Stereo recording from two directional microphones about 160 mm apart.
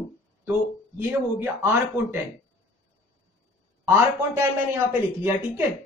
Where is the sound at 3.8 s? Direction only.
15° right (ahead or behind).